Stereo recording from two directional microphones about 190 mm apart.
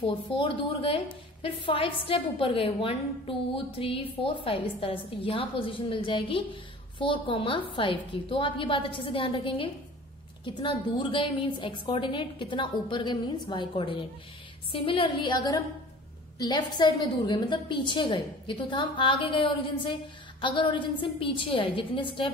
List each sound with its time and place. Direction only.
0.0 s a woman's voice: 30° left (ahead or behind)